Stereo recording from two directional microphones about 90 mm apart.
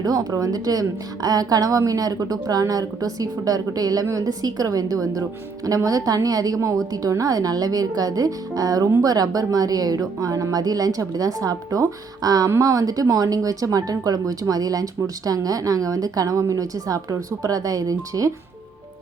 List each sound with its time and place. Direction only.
0.0 s a woman's voice: 45° right (ahead or behind)